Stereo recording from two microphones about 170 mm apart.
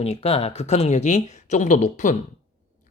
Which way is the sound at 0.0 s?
35° left (ahead or behind).